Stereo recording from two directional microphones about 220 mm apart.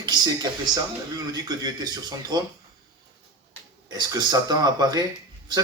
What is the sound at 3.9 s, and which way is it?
Speech, 20° right (ahead or behind).